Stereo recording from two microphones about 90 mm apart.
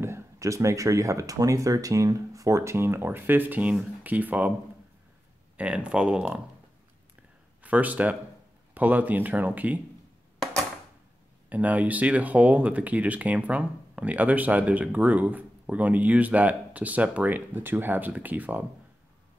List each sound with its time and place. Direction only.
0.0 s speech: 35° right (ahead or behind)
5.6 s speech: 15° right (ahead or behind)
7.6 s speech: 15° right (ahead or behind)
11.4 s speech: 15° right (ahead or behind)